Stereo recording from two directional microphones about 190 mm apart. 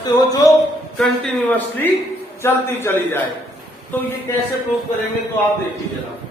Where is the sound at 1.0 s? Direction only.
5° left (ahead or behind).